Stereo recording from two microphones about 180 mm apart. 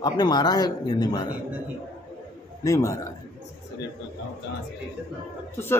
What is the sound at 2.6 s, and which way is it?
Speech, 15° left (ahead or behind).